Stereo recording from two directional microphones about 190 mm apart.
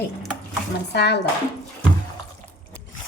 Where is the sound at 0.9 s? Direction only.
60° left (ahead or behind).